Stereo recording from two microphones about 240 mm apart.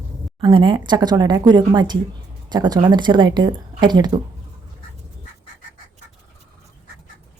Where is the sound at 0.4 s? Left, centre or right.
Centre.